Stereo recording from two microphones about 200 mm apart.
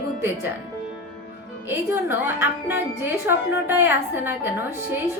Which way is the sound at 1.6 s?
10° right (ahead or behind).